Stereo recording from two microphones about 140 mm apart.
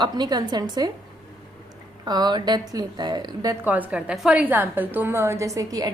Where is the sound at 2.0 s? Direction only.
30° right (ahead or behind).